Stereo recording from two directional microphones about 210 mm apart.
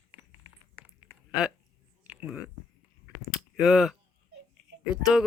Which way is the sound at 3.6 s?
Centre (ahead or behind).